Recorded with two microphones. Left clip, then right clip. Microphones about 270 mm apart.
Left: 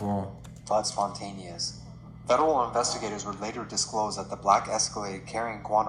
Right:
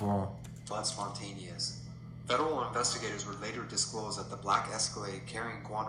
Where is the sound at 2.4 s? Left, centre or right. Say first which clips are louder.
Left 7 dB; left.